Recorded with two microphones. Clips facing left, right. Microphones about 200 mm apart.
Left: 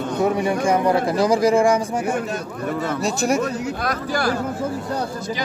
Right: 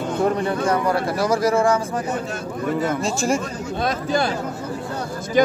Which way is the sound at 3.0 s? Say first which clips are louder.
Left 1 dB; centre (ahead or behind).